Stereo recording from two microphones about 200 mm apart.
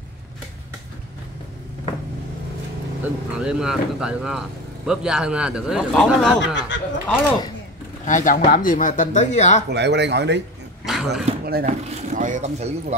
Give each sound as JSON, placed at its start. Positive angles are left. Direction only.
{"t": 3.0, "sound": "speech", "side_deg": -5}
{"t": 6.4, "sound": "speech", "side_deg": 65}
{"t": 7.2, "sound": "speech", "side_deg": 20}
{"t": 8.0, "sound": "speech", "side_deg": 40}
{"t": 9.7, "sound": "speech", "side_deg": -60}
{"t": 10.9, "sound": "speech", "side_deg": 0}
{"t": 11.4, "sound": "speech", "side_deg": -45}